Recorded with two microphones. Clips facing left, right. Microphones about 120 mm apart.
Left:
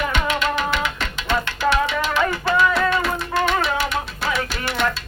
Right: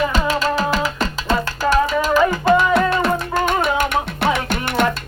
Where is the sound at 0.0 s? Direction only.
35° right (ahead or behind).